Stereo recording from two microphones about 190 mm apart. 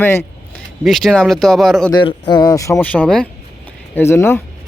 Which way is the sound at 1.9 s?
25° left (ahead or behind).